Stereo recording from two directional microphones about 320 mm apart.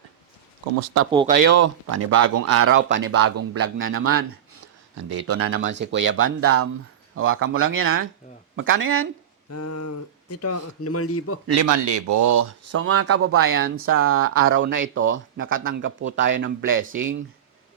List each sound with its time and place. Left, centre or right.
1.5 s speech: right
9.5 s speech: left
11.4 s speech: right
12.8 s speech: right